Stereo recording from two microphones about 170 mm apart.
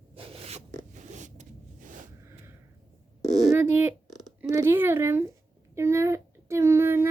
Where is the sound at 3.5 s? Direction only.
10° right (ahead or behind).